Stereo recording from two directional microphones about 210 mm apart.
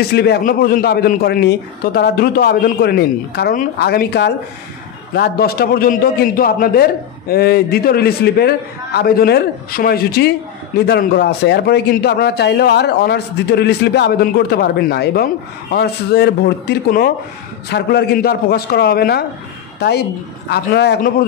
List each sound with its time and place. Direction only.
0.1 s a man's voice: 50° left (ahead or behind)